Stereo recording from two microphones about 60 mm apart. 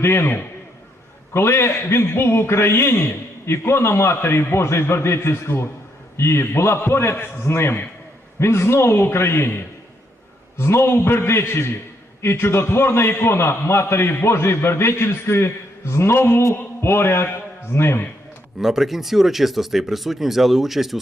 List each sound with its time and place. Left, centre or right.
0.0 s a man's voice: left
10.6 s a man's voice: left
16.6 s mantra: left
17.3 s a man's voice: left
18.6 s speech: centre